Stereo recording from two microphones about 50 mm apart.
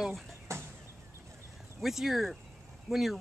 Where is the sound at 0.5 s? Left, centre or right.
Right.